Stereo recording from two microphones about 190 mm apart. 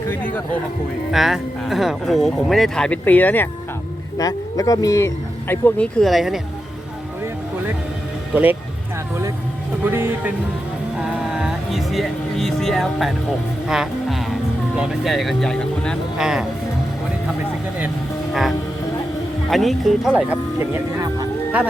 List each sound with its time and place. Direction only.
0.1 s speech: 10° left (ahead or behind)
1.1 s speech: centre (ahead or behind)
9.9 s speech: 10° right (ahead or behind)
11.0 s music: 5° right (ahead or behind)
14.8 s speech: centre (ahead or behind)
19.5 s speech: centre (ahead or behind)